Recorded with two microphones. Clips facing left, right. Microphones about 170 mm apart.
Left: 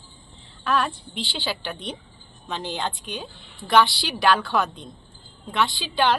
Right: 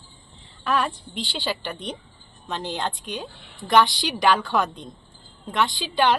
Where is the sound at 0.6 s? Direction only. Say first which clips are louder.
Even; 5° right (ahead or behind).